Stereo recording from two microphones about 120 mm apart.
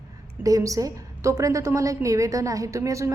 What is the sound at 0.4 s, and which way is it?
A woman's voice, 30° right (ahead or behind).